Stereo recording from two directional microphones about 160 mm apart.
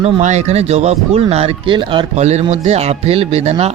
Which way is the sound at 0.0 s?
45° right (ahead or behind).